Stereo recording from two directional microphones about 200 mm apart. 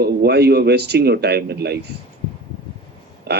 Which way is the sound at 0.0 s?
55° right (ahead or behind).